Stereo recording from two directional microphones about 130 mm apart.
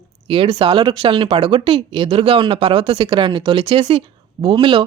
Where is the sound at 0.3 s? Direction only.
45° right (ahead or behind).